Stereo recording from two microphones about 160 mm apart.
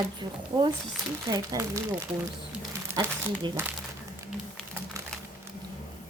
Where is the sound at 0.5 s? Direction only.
20° right (ahead or behind).